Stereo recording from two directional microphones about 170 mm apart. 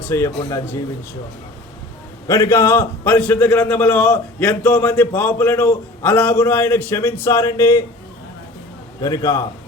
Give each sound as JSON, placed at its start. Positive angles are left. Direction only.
{"t": 0.1, "sound": "a man's voice", "side_deg": 20}
{"t": 2.2, "sound": "a man's voice", "side_deg": 15}
{"t": 9.0, "sound": "a man's voice", "side_deg": 20}